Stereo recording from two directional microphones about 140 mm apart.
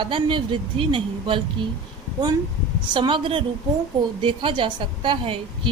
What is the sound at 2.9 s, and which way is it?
A woman's voice, 35° right (ahead or behind).